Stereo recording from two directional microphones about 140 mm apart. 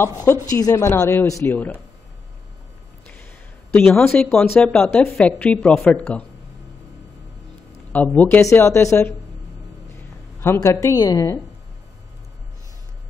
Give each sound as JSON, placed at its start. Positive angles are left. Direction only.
{"t": 0.0, "sound": "a woman's voice", "side_deg": 20}
{"t": 3.7, "sound": "a woman's voice", "side_deg": 5}
{"t": 7.9, "sound": "speech", "side_deg": 10}
{"t": 10.4, "sound": "a woman's voice", "side_deg": 20}